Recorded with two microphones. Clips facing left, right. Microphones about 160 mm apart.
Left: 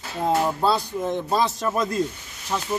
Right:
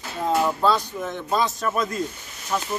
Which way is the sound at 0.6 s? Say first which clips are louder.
Even; 30° left (ahead or behind).